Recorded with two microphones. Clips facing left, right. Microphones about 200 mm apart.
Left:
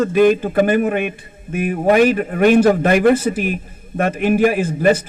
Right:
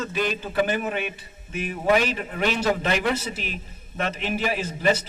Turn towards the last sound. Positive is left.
turn(degrees=50)  # may be behind; listen again after turning